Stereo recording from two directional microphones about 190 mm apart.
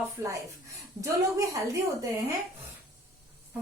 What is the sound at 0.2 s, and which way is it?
Speech, 15° right (ahead or behind).